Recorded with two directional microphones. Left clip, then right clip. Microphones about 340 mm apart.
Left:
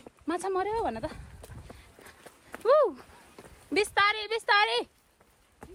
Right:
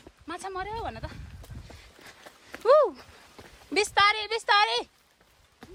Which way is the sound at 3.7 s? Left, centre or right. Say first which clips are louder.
Right 3 dB; centre.